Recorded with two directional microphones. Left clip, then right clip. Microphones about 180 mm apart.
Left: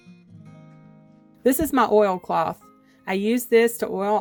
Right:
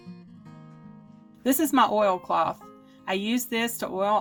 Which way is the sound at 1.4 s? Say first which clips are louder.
Left 2 dB; 40° left (ahead or behind).